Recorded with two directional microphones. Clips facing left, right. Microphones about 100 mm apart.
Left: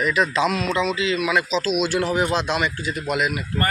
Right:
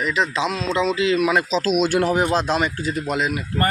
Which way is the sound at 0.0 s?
20° right (ahead or behind).